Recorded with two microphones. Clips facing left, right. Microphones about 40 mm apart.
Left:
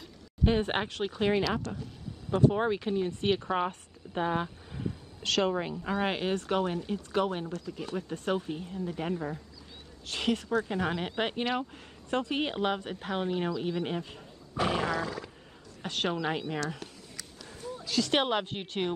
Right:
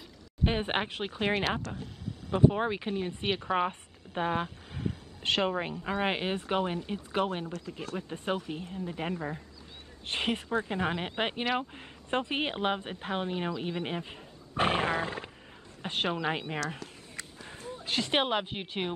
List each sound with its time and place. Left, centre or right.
0.4 s speech: right
1.8 s a sound: right
2.5 s speech: centre; by 5.8 s right
5.9 s speech: centre
14.6 s dog: right
15.8 s a woman's voice: right
17.5 s a sound: right
17.8 s speech: right
18.1 s speech: centre